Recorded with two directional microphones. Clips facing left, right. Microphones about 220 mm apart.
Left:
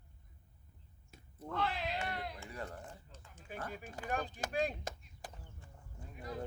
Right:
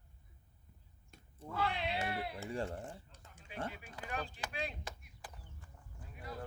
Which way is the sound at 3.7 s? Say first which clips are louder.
Left 4 dB; 45° left (ahead or behind).